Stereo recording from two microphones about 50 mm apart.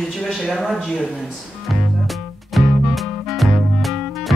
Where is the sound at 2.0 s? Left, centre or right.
Centre.